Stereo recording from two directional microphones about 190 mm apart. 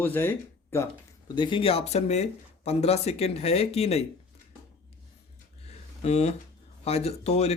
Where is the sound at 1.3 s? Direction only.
25° left (ahead or behind).